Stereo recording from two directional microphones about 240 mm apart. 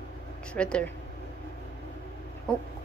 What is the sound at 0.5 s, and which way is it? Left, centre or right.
Speech, centre.